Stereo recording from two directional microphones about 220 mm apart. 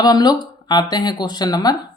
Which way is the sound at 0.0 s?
20° left (ahead or behind).